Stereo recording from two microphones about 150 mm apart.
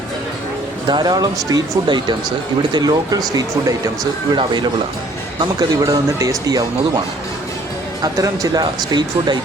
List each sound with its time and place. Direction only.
0.9 s speech: 30° right (ahead or behind)
8.0 s speech: 25° right (ahead or behind)